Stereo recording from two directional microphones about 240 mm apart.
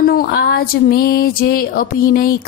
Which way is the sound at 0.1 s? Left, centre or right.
Left.